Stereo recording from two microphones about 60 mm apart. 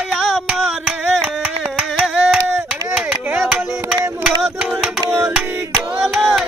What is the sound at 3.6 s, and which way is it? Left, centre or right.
Music, right.